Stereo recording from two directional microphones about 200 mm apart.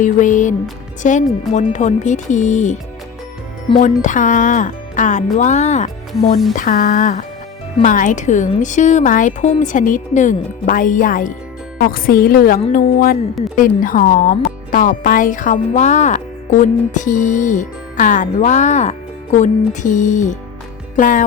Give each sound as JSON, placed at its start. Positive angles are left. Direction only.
{"t": 0.0, "sound": "speech", "side_deg": 40}
{"t": 3.8, "sound": "a woman's voice", "side_deg": 40}